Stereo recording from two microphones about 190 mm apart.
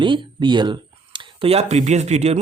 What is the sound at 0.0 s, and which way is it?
Speech, 25° right (ahead or behind).